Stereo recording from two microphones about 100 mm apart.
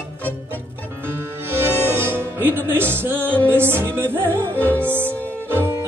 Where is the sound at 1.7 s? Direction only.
25° right (ahead or behind).